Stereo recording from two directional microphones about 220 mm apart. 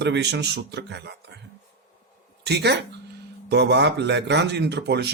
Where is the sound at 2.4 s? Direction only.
50° right (ahead or behind).